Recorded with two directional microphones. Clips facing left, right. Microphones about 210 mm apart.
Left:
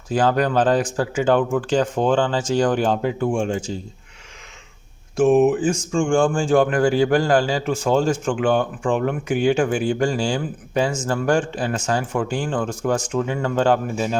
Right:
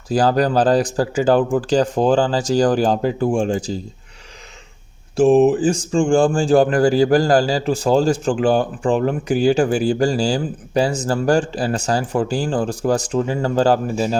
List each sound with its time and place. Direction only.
0.1 s speech: 35° right (ahead or behind)
5.1 s speech: 35° right (ahead or behind)